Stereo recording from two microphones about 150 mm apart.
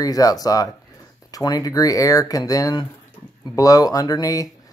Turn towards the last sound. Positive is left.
turn(degrees=25)  # may be behind; listen again after turning